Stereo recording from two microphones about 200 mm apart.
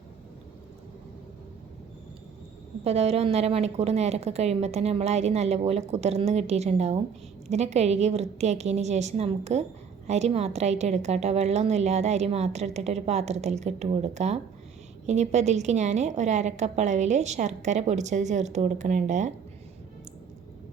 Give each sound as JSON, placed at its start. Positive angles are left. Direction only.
{"t": 2.8, "sound": "a woman's voice", "side_deg": -30}